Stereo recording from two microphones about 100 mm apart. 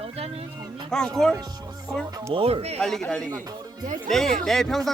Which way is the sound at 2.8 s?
5° left (ahead or behind).